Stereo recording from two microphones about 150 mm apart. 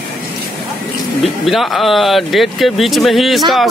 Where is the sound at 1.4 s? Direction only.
Centre (ahead or behind).